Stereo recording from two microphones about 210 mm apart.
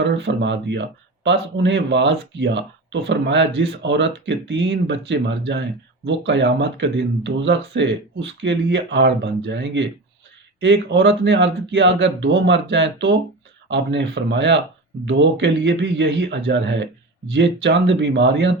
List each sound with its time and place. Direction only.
0.0 s speech: 60° right (ahead or behind)